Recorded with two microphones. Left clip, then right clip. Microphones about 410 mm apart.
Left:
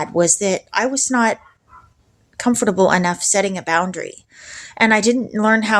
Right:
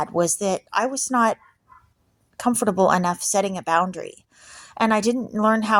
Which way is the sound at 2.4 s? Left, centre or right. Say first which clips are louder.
Left 4 dB; right.